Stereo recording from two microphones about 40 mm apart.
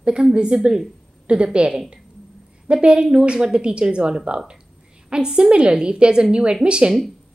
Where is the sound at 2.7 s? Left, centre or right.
Right.